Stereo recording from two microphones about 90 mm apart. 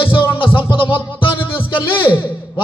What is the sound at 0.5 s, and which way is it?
Music, 70° left (ahead or behind).